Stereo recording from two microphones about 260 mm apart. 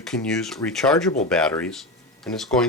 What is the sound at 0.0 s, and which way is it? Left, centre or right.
Speech, centre.